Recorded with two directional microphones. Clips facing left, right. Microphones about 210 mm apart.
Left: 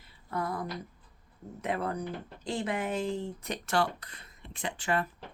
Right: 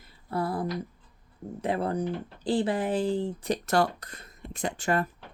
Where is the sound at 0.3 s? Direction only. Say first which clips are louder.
Right 5 dB; 30° right (ahead or behind).